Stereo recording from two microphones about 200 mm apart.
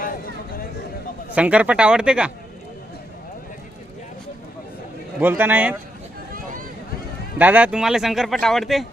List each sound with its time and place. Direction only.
0.0 s a sound: 45° left (ahead or behind)
1.3 s speech: 5° right (ahead or behind)
5.2 s a man's voice: 10° right (ahead or behind)
6.3 s boat: 40° right (ahead or behind)
7.3 s speech: 10° right (ahead or behind)